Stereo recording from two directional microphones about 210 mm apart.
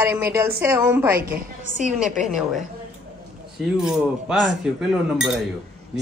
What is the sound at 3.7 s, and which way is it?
Speech, 5° right (ahead or behind).